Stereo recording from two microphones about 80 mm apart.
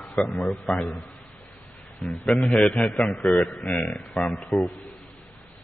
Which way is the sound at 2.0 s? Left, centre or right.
Centre.